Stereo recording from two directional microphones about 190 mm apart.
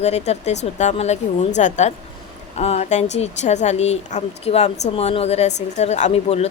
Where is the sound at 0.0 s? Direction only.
35° left (ahead or behind).